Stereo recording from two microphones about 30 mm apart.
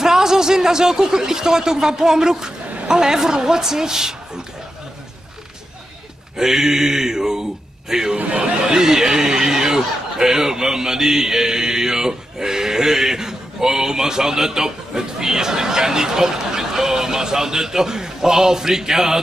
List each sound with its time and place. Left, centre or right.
0.0 s speech: centre
6.3 s mantra: centre
8.3 s speech: right
8.7 s speech: centre